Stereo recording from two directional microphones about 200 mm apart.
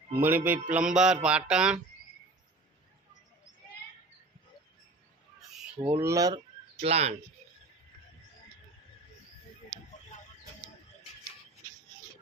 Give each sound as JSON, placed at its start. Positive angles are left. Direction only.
{"t": 0.1, "sound": "music", "side_deg": -10}
{"t": 6.0, "sound": "speech", "side_deg": -15}
{"t": 6.8, "sound": "speech", "side_deg": -30}